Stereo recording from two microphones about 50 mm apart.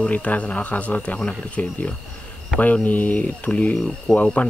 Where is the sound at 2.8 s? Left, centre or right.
Left.